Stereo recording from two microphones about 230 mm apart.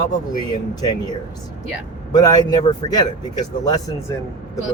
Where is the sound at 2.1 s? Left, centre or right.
Centre.